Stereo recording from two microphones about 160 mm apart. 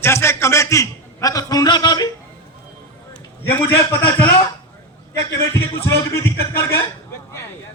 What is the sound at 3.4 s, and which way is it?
Speech, 15° left (ahead or behind).